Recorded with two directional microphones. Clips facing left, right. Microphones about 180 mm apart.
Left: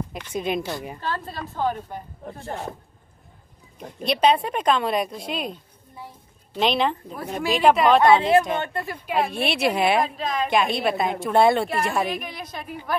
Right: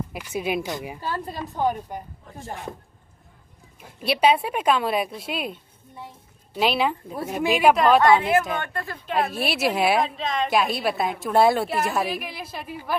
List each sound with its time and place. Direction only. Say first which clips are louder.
0.1 s a woman's voice: even; 5° right (ahead or behind)
2.2 s speech: left 8 dB; 60° left (ahead or behind)
4.0 s a woman's voice: even; 5° right (ahead or behind)
7.7 s a woman's voice: left 1 dB; centre (ahead or behind)
8.0 s speech: left 2 dB; 25° left (ahead or behind)
9.1 s a woman's voice: left 1 dB; centre (ahead or behind)